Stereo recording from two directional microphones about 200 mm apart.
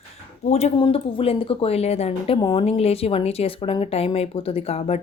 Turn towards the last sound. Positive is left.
turn(degrees=30)  # may be behind; listen again after turning